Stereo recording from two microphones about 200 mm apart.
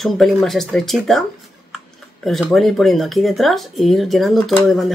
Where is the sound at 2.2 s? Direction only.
Centre (ahead or behind).